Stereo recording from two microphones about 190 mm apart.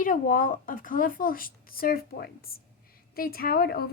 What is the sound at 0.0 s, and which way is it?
A woman's voice, 45° left (ahead or behind).